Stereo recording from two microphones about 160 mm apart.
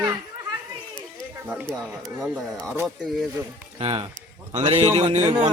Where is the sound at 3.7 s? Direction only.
35° right (ahead or behind).